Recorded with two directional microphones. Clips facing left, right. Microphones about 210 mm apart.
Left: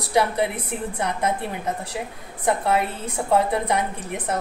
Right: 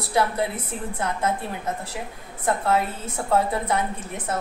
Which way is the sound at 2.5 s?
15° left (ahead or behind).